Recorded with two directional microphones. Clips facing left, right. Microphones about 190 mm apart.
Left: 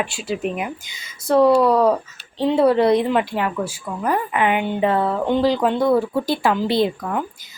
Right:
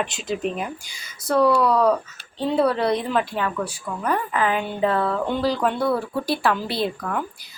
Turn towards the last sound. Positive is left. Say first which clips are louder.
# left 5 dB
turn(degrees=20)  # may be behind; listen again after turning